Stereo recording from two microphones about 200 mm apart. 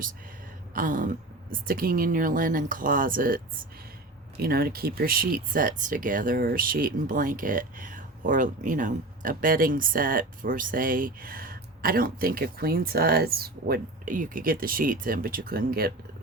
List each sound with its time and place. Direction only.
0.7 s speech: 40° right (ahead or behind)